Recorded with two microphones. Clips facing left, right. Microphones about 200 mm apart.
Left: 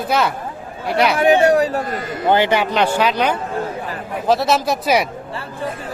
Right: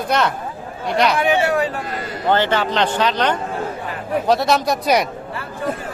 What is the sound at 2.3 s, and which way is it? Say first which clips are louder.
A man's voice: left 2 dB; 10° left (ahead or behind).